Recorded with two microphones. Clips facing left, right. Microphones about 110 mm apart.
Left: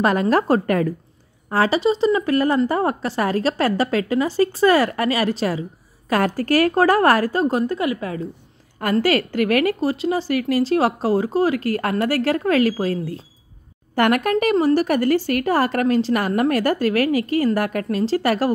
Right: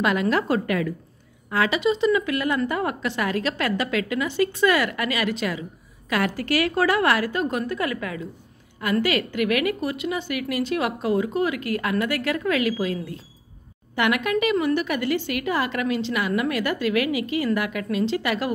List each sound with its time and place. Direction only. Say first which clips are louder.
0.0 s a woman's voice: left 4 dB; 40° left (ahead or behind)